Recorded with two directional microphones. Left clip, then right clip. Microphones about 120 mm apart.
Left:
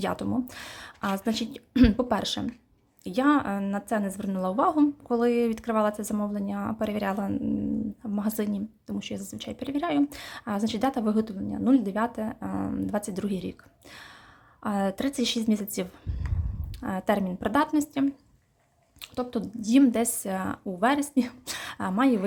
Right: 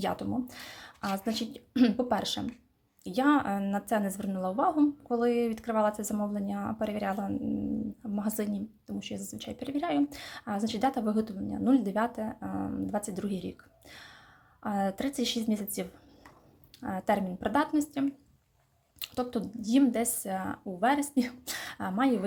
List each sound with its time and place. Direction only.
0.0 s a woman's voice: 25° left (ahead or behind)
4.4 s a woman's voice: 25° left (ahead or behind)
18.9 s a woman's voice: 5° left (ahead or behind)
19.4 s speech: 25° left (ahead or behind)